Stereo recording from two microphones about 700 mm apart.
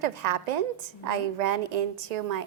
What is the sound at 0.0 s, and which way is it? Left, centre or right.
A woman's voice, right.